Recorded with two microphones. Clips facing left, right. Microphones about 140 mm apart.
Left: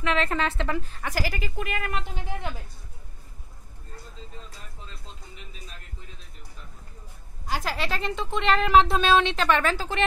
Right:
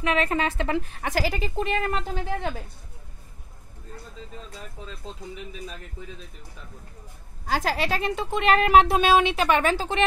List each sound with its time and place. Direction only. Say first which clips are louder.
0.0 s a woman's voice: right 2 dB; 10° right (ahead or behind); by 2.5 s 35° right (ahead or behind)
7.9 s a woman's voice: right 3 dB; 10° right (ahead or behind)